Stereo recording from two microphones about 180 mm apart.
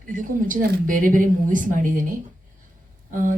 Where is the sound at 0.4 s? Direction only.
45° right (ahead or behind).